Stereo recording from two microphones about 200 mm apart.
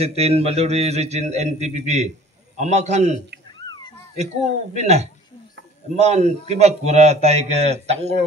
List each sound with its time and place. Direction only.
0.0 s a man's voice: 30° right (ahead or behind)
3.6 s cat: 20° left (ahead or behind)
4.2 s a man's voice: 35° right (ahead or behind)